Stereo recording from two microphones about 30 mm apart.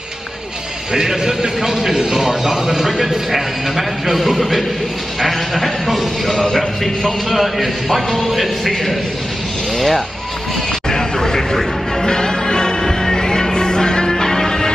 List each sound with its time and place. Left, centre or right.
0.9 s a man's voice: right; by 6.3 s centre
6.3 s speech: centre
7.3 s speech: centre
10.9 s a sound: centre
12.0 s music: left